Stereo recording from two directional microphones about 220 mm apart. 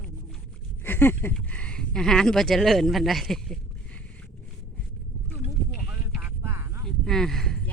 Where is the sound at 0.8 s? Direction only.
10° left (ahead or behind).